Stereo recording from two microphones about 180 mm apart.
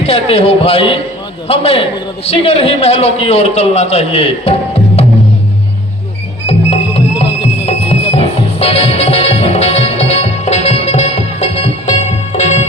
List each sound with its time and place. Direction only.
0.0 s a man's voice: 35° left (ahead or behind)
6.5 s music: 35° left (ahead or behind)